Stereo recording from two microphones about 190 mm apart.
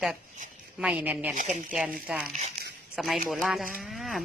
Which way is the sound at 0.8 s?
5° right (ahead or behind).